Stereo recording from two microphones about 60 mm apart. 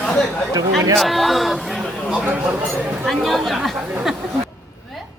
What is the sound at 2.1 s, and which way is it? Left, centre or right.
Speech, right.